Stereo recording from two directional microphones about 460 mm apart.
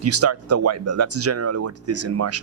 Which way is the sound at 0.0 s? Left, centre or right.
Right.